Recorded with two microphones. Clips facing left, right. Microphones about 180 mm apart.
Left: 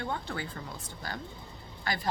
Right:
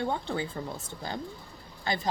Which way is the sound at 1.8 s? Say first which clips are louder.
Right 3 dB; 25° right (ahead or behind).